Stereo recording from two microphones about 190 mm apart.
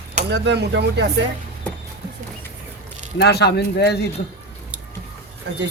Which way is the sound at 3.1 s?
60° left (ahead or behind).